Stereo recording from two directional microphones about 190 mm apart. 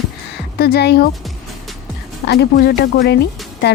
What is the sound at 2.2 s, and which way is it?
Speech, 60° left (ahead or behind).